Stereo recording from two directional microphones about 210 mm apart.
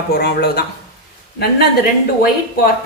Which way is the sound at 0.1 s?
50° left (ahead or behind).